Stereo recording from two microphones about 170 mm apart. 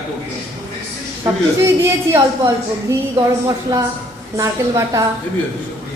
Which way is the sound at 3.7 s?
20° right (ahead or behind).